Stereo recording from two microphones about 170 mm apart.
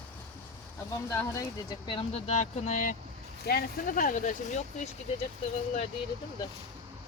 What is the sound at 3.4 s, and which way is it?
Speech, 60° left (ahead or behind).